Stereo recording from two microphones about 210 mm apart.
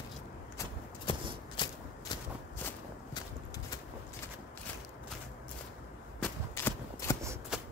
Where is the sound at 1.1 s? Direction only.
25° left (ahead or behind).